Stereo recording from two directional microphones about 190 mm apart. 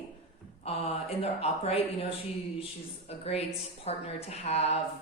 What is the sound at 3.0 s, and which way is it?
Speech, 35° left (ahead or behind).